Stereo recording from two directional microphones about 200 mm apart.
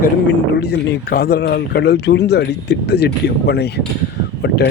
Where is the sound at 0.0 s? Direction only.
55° left (ahead or behind).